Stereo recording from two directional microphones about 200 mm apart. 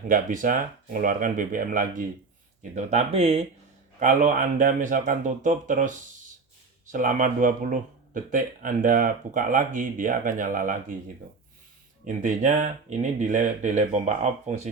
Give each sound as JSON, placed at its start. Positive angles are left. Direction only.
{"t": 0.1, "sound": "speech", "side_deg": -40}
{"t": 2.7, "sound": "speech", "side_deg": -35}
{"t": 12.0, "sound": "speech", "side_deg": -40}